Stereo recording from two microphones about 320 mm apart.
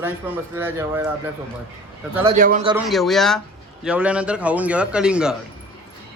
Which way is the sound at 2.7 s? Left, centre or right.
Centre.